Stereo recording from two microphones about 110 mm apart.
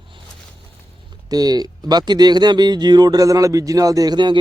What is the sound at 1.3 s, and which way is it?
Speech, 35° right (ahead or behind).